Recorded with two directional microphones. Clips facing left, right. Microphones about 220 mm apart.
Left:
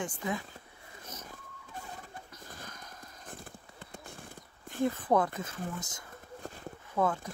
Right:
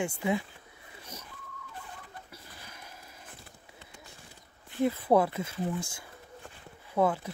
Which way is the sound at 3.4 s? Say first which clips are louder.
Left 4 dB; 50° left (ahead or behind).